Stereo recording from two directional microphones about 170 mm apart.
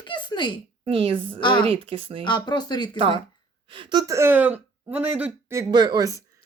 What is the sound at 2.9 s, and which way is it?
Speech, 30° right (ahead or behind).